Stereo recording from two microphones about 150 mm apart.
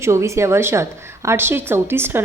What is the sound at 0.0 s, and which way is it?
A woman's voice, 20° right (ahead or behind).